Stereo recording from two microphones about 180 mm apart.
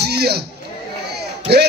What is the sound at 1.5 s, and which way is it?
Speech, 65° right (ahead or behind).